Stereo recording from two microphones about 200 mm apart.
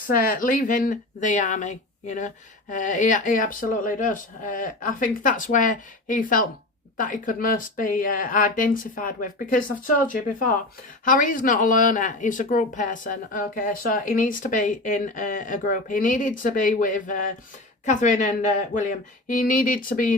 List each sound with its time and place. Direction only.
0.3 s speech: 40° left (ahead or behind)
11.0 s speech: 40° left (ahead or behind)